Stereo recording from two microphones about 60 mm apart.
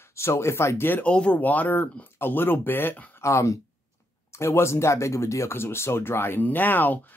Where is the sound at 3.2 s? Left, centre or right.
Left.